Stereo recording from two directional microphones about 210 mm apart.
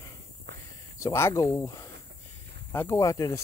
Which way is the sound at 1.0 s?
15° left (ahead or behind).